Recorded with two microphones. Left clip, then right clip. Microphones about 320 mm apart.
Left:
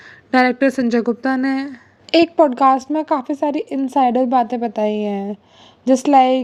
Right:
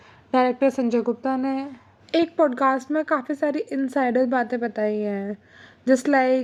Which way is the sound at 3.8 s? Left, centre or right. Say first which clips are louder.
Left 6 dB; centre.